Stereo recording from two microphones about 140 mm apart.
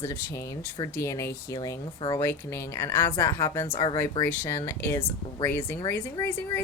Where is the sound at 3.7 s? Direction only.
35° left (ahead or behind).